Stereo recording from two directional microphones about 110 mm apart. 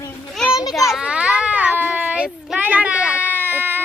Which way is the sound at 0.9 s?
10° right (ahead or behind).